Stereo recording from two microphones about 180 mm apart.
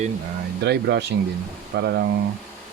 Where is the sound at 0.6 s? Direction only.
65° right (ahead or behind).